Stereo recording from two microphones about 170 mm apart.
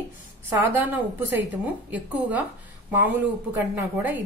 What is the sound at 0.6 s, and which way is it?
Speech, 10° right (ahead or behind).